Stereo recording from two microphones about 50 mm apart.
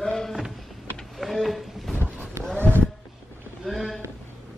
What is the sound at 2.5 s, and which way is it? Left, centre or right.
Vehicle, right.